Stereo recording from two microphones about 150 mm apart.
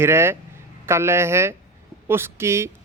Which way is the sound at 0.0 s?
15° right (ahead or behind).